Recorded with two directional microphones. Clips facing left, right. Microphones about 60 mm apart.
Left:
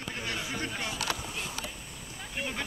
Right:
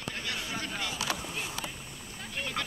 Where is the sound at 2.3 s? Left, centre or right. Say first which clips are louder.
Even; centre.